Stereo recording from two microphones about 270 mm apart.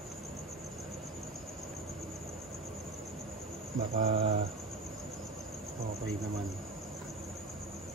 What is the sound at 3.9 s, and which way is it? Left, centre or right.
Cricket, right.